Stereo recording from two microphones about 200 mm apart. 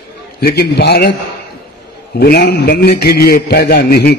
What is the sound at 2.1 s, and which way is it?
A man's voice, 55° left (ahead or behind).